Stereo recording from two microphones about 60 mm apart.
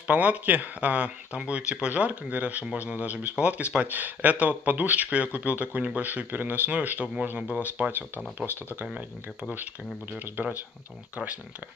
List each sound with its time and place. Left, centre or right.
0.0 s speech: right